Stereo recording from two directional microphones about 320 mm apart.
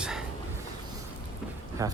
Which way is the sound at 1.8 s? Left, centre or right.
Centre.